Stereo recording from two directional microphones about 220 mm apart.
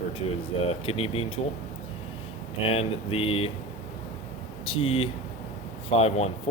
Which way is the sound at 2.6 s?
25° left (ahead or behind).